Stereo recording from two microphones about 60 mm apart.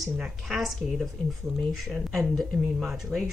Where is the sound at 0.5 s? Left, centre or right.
Centre.